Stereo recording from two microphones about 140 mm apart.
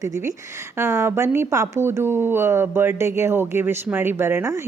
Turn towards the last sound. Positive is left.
turn(degrees=-20)  # may be behind; listen again after turning